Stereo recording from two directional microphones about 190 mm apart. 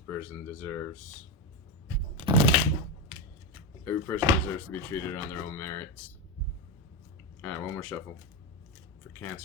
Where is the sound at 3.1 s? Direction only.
25° right (ahead or behind).